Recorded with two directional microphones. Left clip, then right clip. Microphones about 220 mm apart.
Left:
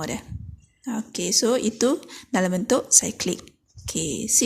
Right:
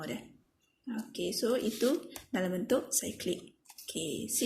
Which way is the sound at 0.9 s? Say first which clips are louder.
Left 9 dB; 45° left (ahead or behind).